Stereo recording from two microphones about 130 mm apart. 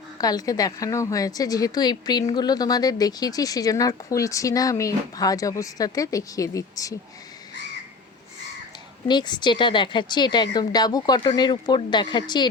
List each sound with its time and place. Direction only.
0.2 s speech: 30° left (ahead or behind)
9.0 s a woman's voice: 35° left (ahead or behind)